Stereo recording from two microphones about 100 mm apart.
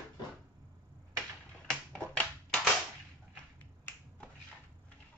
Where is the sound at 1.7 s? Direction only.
10° left (ahead or behind).